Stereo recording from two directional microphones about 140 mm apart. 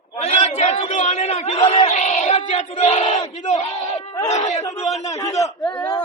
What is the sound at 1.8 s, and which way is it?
Battle cry, 55° left (ahead or behind).